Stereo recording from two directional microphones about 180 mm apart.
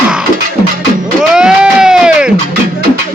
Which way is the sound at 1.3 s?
5° right (ahead or behind).